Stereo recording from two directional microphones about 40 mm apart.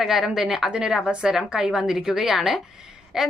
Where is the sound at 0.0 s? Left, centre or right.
Centre.